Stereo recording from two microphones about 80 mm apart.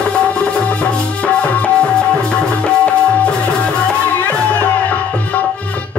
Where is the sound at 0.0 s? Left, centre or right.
Centre.